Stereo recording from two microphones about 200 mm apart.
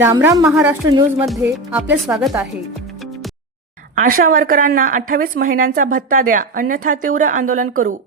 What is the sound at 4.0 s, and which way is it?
A woman's voice, 45° right (ahead or behind).